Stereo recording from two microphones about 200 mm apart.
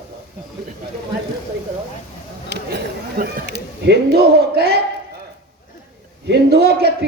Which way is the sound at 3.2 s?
50° right (ahead or behind).